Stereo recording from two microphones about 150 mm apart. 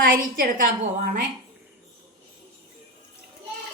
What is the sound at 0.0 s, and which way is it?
Speech, 70° right (ahead or behind).